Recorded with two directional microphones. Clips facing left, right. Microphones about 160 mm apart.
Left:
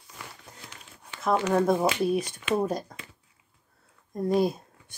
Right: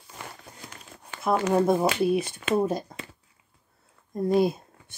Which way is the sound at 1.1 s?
50° right (ahead or behind).